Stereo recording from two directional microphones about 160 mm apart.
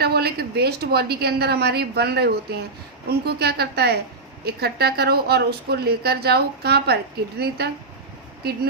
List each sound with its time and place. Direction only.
0.0 s a woman's voice: 80° right